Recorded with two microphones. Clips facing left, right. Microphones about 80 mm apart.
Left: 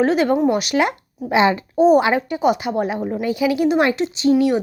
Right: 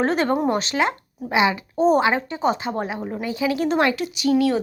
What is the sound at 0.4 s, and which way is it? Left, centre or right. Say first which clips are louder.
Speech: left 3 dB; right.